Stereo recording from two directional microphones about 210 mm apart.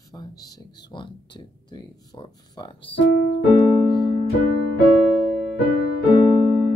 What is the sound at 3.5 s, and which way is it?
Music, 25° left (ahead or behind).